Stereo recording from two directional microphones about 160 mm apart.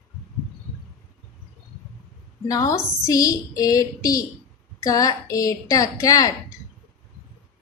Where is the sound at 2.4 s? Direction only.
20° left (ahead or behind).